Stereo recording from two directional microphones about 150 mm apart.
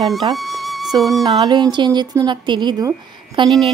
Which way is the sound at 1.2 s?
30° right (ahead or behind).